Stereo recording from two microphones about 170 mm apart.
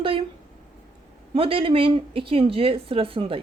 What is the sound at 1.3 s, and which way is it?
Speech, 35° right (ahead or behind).